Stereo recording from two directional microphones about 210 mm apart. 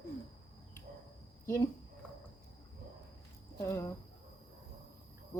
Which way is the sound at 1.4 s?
15° left (ahead or behind).